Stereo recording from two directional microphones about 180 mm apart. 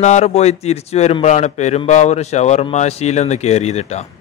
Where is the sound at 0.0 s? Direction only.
40° left (ahead or behind).